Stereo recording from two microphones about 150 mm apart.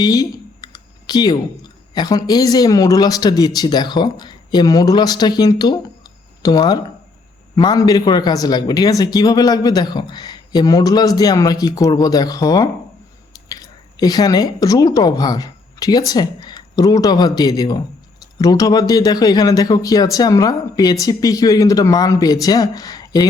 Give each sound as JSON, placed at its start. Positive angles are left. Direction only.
{"t": 0.0, "sound": "computer keyboard", "side_deg": 25}
{"t": 1.9, "sound": "speech", "side_deg": 25}